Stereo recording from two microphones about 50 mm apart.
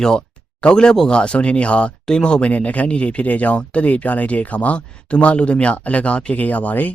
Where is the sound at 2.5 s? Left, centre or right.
Left.